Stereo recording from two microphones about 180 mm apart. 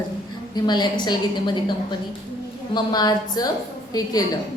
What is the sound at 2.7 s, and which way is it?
A woman's voice, 20° left (ahead or behind).